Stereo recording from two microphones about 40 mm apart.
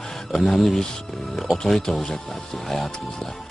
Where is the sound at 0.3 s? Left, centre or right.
Centre.